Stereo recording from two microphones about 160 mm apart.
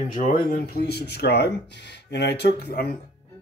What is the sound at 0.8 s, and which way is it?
Speech, 90° left.